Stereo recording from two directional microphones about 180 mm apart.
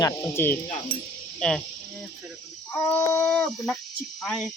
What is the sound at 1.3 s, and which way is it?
Insect, 5° left (ahead or behind).